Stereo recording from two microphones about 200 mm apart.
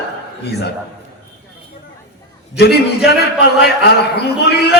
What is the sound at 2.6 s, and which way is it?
A man's voice, 55° left (ahead or behind).